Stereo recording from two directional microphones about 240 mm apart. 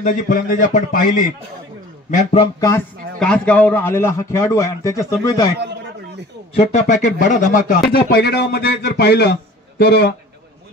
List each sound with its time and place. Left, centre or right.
0.0 s a man's voice: left
2.6 s a man's voice: centre
6.5 s a man's voice: left